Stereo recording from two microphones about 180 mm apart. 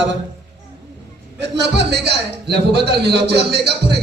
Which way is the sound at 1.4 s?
70° right (ahead or behind).